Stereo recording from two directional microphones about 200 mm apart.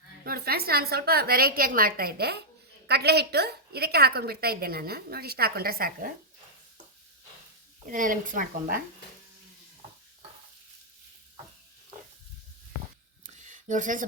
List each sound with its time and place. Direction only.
0.3 s a woman's voice: 50° right (ahead or behind)
7.9 s a woman's voice: 40° right (ahead or behind)
13.2 s a sound: 40° right (ahead or behind)